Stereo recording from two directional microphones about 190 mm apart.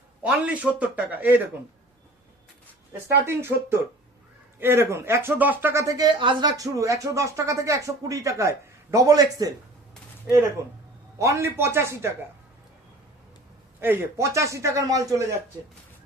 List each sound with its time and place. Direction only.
0.2 s speech: 5° right (ahead or behind)
3.2 s speech: 15° right (ahead or behind)
10.6 s speech: 15° right (ahead or behind)
13.8 s speech: 15° right (ahead or behind)